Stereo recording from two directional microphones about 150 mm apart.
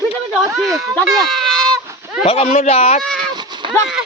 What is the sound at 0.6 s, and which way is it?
Speech, centre (ahead or behind).